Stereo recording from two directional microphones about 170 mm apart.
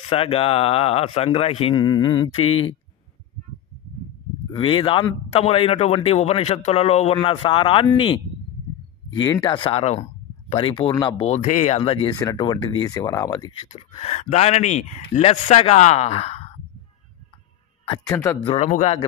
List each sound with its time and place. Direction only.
0.1 s a man's voice: 35° left (ahead or behind)
4.5 s a man's voice: 30° left (ahead or behind)
13.7 s a man's voice: 35° left (ahead or behind)
18.0 s speech: 15° left (ahead or behind)
18.5 s a man's voice: 40° left (ahead or behind)